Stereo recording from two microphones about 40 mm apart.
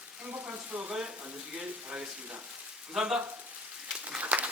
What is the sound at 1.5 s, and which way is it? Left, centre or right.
Speech, right.